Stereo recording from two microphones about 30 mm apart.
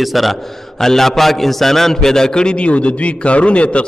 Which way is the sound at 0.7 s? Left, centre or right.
Centre.